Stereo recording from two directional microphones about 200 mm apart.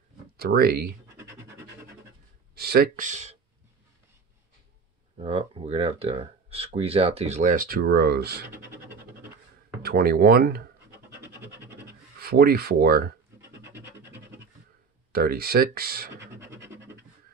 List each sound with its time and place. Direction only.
0.4 s speech: 50° right (ahead or behind)
2.5 s speech: 50° right (ahead or behind)
5.1 s speech: 30° right (ahead or behind); by 8.5 s 55° right (ahead or behind)
8.5 s speech: 10° right (ahead or behind)
9.8 s speech: 50° right (ahead or behind)
11.1 s scratch: 10° right (ahead or behind)
12.2 s speech: 50° right (ahead or behind)
13.6 s scratch: 10° right (ahead or behind)
15.1 s speech: 50° right (ahead or behind)